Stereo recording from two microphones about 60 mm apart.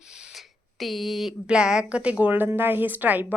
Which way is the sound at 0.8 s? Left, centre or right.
Centre.